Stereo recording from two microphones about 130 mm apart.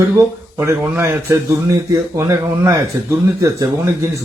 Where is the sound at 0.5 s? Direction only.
20° right (ahead or behind).